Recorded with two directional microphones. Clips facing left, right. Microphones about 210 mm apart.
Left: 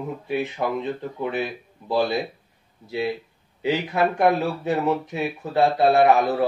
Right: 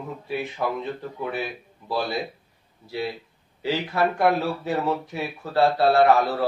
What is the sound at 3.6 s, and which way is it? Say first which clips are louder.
Speech: left 2 dB; 20° left (ahead or behind).